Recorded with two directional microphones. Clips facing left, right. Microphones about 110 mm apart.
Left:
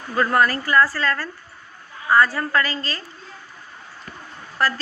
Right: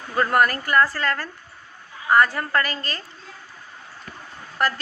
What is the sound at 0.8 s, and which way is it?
Speech, 20° right (ahead or behind).